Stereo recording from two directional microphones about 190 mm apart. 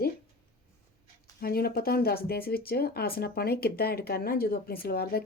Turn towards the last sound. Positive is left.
turn(degrees=55)  # may be behind; listen again after turning